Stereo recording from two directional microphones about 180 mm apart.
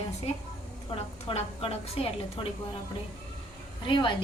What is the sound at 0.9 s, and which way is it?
A woman's voice, 30° left (ahead or behind).